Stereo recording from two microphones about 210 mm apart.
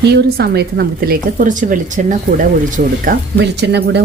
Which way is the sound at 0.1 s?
50° right (ahead or behind).